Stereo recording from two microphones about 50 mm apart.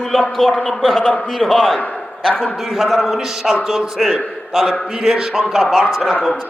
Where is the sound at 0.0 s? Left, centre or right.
Centre.